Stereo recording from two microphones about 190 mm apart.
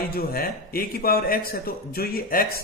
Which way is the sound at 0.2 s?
50° left (ahead or behind).